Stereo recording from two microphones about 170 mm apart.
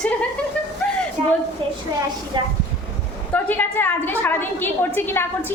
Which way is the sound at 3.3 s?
10° left (ahead or behind).